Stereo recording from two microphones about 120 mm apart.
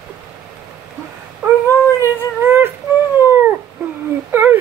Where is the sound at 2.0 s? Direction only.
20° right (ahead or behind).